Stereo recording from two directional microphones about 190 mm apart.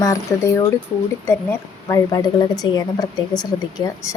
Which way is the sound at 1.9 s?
15° left (ahead or behind).